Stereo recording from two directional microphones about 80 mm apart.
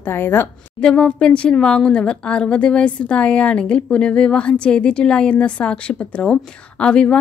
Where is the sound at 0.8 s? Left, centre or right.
Centre.